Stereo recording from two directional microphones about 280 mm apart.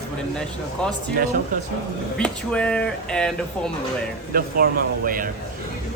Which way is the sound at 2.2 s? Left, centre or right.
Centre.